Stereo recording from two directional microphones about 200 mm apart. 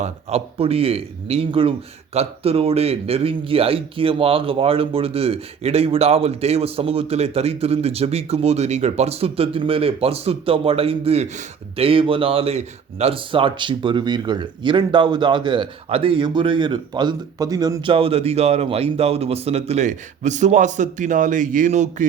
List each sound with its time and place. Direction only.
0.0 s a man's voice: 30° right (ahead or behind)